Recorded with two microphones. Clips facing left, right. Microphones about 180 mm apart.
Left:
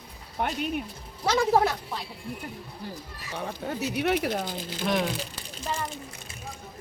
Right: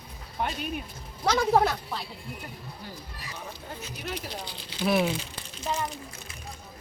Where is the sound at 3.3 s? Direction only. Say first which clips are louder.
Left 10 dB; 70° left (ahead or behind); by 4.8 s 45° left (ahead or behind).